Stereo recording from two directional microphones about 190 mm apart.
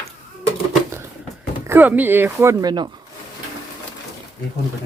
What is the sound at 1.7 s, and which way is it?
Speech, 10° right (ahead or behind).